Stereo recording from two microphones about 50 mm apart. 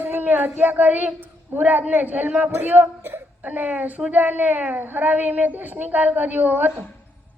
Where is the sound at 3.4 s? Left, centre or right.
Right.